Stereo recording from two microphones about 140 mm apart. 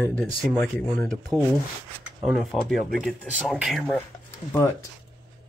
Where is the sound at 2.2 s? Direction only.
Centre (ahead or behind).